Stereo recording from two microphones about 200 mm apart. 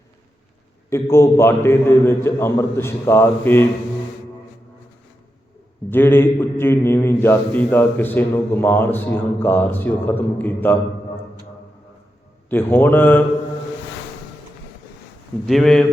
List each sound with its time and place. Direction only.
0.9 s a man's voice: 15° left (ahead or behind)
5.9 s a man's voice: 10° left (ahead or behind)
12.5 s a man's voice: 10° left (ahead or behind)
15.4 s speech: centre (ahead or behind)